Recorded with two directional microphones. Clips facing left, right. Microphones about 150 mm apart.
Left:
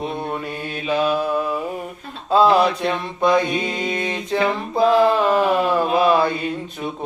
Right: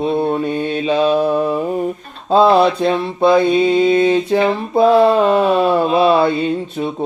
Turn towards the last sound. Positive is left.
turn(degrees=-25)  # may be behind; listen again after turning